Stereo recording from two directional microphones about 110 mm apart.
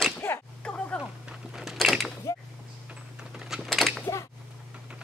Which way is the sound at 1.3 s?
5° right (ahead or behind).